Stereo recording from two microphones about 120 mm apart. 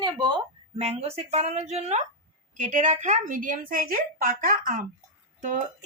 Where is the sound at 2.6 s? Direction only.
90° right.